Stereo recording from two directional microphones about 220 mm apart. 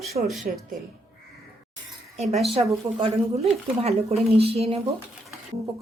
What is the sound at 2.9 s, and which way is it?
A woman's voice, 25° right (ahead or behind).